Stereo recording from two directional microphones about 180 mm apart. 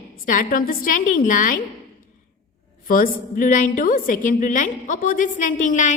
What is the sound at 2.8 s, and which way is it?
A woman's voice, 50° left (ahead or behind).